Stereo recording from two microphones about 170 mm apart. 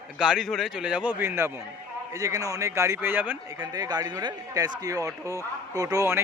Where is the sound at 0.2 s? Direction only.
Centre (ahead or behind).